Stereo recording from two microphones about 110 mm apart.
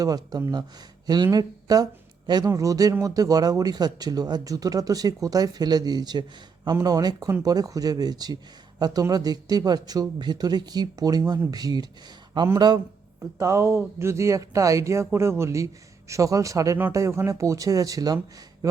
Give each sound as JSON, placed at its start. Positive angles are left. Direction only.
{"t": 0.0, "sound": "speech", "side_deg": -35}
{"t": 13.4, "sound": "speech", "side_deg": -25}